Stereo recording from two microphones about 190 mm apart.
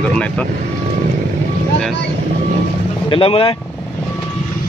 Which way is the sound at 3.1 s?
30° left (ahead or behind).